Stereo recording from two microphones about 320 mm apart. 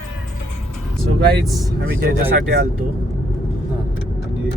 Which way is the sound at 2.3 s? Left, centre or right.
Right.